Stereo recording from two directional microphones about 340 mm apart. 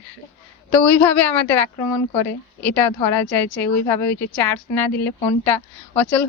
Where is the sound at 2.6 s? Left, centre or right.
Centre.